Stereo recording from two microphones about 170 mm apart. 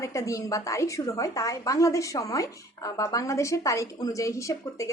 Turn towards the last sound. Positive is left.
turn(degrees=20)  # may be behind; listen again after turning